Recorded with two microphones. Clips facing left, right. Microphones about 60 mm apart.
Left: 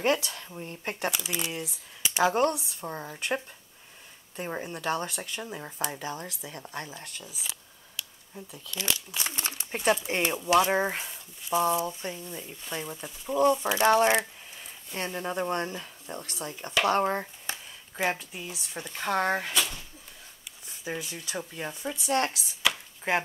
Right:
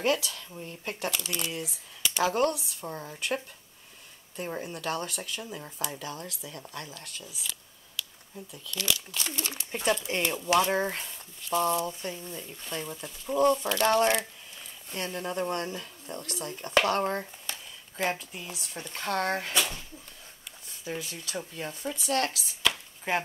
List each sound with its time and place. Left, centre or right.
0.7 s speech: left
1.1 s speech: centre
16.8 s a sound: left
18.0 s speech: centre
20.8 s speech: left
22.6 s chopping: centre